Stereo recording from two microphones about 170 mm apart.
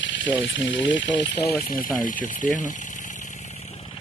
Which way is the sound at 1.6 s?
55° left (ahead or behind).